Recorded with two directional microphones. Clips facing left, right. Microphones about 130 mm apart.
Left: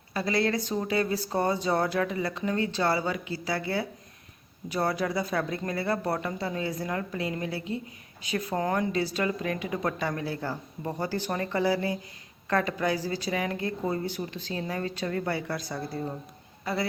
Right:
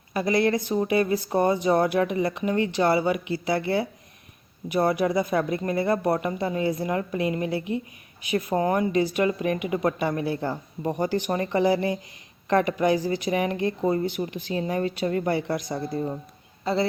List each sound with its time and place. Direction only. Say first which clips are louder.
0.1 s speech: right 5 dB; 15° right (ahead or behind)